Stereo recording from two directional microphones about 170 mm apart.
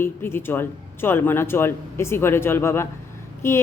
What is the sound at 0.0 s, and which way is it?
A woman's voice, 15° left (ahead or behind).